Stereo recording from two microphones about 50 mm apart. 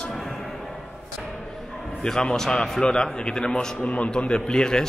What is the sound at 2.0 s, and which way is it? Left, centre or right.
A man's voice, centre.